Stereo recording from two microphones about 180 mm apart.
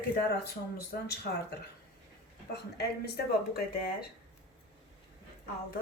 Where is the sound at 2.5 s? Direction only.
60° left (ahead or behind).